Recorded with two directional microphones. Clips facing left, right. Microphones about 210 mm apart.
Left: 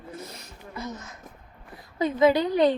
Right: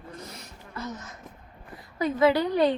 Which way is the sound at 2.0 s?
20° left (ahead or behind).